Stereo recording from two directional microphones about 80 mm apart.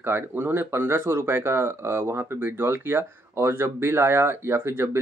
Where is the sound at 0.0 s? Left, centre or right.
Right.